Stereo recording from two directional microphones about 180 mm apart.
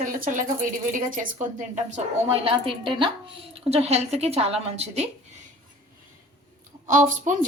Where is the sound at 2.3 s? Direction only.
30° right (ahead or behind).